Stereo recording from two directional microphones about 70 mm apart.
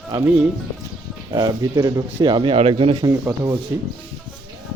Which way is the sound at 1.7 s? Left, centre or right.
Right.